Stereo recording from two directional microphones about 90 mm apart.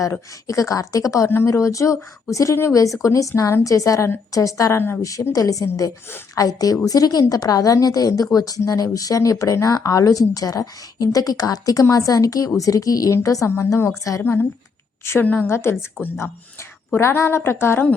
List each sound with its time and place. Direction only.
0.0 s a woman's voice: 40° left (ahead or behind)